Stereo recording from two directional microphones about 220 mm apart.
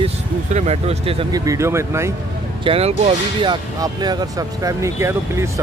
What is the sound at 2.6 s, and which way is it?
Speech, 25° right (ahead or behind).